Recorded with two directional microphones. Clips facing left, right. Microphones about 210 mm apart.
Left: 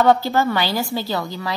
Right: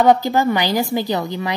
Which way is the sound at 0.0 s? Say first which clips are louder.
Right 2 dB; 15° right (ahead or behind).